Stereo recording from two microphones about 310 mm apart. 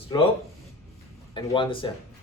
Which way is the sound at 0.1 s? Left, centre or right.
Centre.